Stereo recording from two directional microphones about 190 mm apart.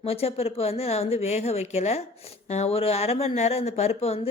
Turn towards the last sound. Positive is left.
turn(degrees=30)  # may be behind; listen again after turning